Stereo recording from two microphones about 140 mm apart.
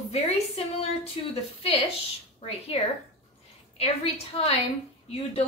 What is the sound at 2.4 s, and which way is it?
A woman's voice, 50° left (ahead or behind).